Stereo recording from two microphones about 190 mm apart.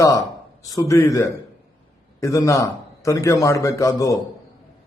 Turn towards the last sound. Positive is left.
turn(degrees=15)  # may be behind; listen again after turning